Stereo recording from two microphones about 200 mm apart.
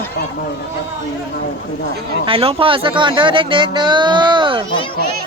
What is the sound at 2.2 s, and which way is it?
Speech, 30° right (ahead or behind).